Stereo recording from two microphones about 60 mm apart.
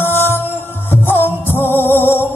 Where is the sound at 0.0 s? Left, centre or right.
Left.